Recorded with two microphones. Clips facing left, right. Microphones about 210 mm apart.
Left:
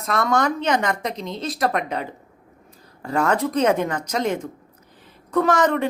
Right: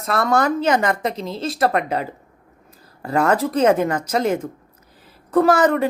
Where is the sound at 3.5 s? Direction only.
5° right (ahead or behind).